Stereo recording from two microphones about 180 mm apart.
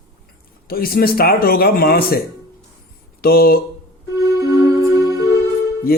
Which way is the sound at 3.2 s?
55° left (ahead or behind).